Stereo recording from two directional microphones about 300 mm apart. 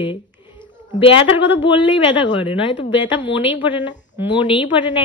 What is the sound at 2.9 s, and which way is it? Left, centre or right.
Speech, centre.